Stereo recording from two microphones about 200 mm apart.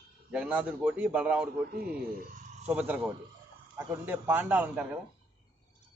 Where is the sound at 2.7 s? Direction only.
5° right (ahead or behind).